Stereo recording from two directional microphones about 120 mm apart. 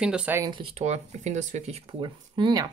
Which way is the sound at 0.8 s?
75° right (ahead or behind).